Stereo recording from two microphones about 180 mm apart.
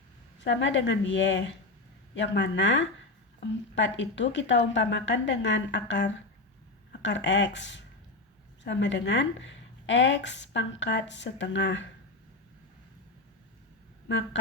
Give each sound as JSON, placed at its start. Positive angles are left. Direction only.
{"t": 0.3, "sound": "a woman's voice", "side_deg": 90}
{"t": 2.1, "sound": "a woman's voice", "side_deg": 75}
{"t": 8.6, "sound": "a woman's voice", "side_deg": 80}